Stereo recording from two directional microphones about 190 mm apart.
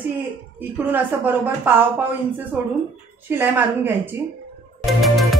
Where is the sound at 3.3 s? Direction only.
10° right (ahead or behind).